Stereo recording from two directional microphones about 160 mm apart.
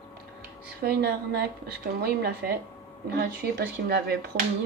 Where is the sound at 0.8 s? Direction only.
80° right.